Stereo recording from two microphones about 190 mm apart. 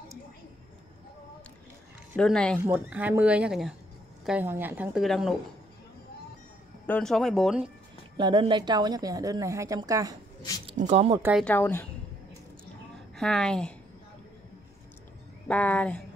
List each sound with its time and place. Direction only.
2.1 s speech: 5° left (ahead or behind)
2.6 s speech: 10° right (ahead or behind)
6.9 s speech: 5° left (ahead or behind)
8.2 s a woman's voice: 25° right (ahead or behind)
10.8 s speech: 35° right (ahead or behind)
11.4 s speech: 10° left (ahead or behind)
13.1 s speech: 5° left (ahead or behind)
15.4 s speech: 10° left (ahead or behind)